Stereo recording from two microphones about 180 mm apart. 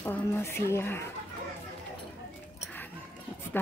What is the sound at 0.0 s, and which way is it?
Speech, 10° left (ahead or behind).